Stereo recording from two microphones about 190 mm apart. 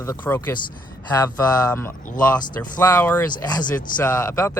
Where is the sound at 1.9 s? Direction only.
45° left (ahead or behind).